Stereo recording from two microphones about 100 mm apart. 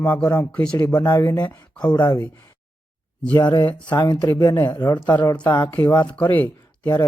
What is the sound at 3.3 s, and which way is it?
Speech, 50° left (ahead or behind).